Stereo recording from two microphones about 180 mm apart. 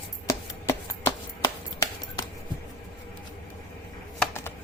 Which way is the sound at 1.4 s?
20° left (ahead or behind).